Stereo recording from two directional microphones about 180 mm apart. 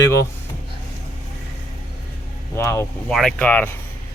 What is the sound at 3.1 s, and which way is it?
Speech, 5° left (ahead or behind).